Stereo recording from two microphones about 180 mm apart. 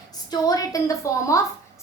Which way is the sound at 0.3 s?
20° left (ahead or behind).